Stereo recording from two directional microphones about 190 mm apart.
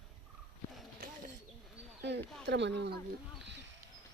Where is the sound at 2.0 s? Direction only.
65° right (ahead or behind).